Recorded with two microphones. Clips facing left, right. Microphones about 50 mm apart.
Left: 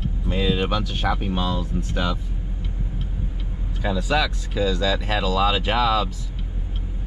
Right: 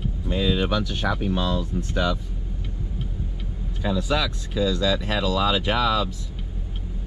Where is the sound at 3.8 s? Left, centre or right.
Left.